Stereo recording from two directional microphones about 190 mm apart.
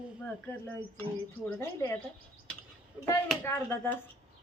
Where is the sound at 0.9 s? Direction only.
10° left (ahead or behind).